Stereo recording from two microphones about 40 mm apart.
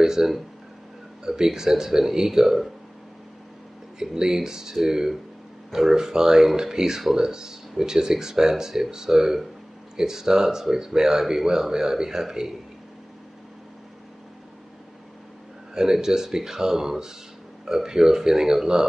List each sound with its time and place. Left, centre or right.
0.0 s speech: centre
4.0 s speech: centre
15.7 s speech: centre